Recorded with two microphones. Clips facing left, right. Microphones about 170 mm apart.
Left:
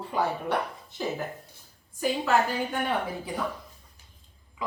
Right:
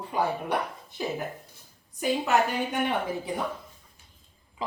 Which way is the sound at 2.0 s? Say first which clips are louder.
Even; 20° right (ahead or behind).